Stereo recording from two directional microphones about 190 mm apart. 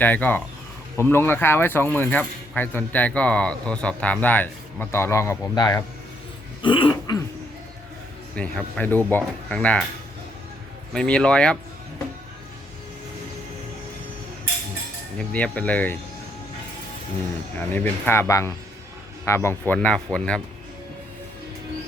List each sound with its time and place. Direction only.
0.0 s speech: 10° left (ahead or behind)
6.6 s dog: 25° left (ahead or behind)
8.4 s speech: 5° left (ahead or behind)
10.9 s speech: 5° left (ahead or behind)
15.2 s speech: 5° left (ahead or behind)
17.7 s speech: 10° left (ahead or behind)